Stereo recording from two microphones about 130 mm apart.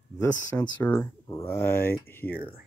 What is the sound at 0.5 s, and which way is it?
Speech, 10° left (ahead or behind).